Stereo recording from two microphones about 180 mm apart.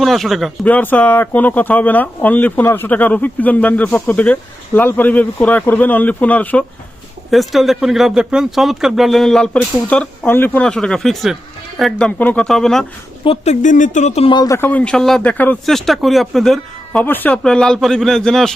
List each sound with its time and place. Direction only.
0.0 s a man's voice: centre (ahead or behind)
13.2 s speech: 35° left (ahead or behind)
14.3 s a man's voice: 20° left (ahead or behind); by 18.5 s 5° left (ahead or behind)